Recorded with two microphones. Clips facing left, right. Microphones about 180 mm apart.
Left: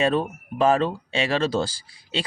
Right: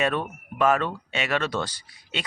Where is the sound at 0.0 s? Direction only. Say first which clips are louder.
Left 4 dB; 30° left (ahead or behind).